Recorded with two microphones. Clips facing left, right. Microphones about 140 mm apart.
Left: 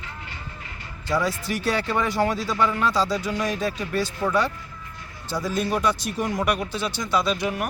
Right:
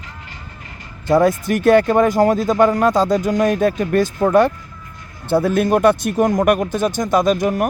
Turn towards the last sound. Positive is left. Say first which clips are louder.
# right 8 dB
turn(degrees=-45)  # may be behind; listen again after turning